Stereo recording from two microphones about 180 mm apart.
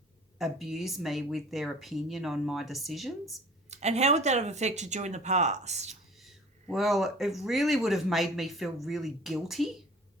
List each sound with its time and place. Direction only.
0.3 s speech: centre (ahead or behind)
3.7 s speech: 40° right (ahead or behind)
5.9 s speech: centre (ahead or behind)